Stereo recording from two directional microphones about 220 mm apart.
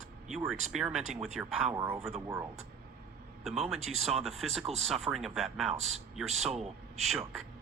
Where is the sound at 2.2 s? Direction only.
15° right (ahead or behind).